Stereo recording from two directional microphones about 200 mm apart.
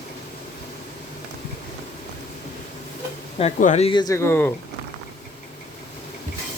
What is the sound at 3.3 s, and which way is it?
Speech, 35° left (ahead or behind).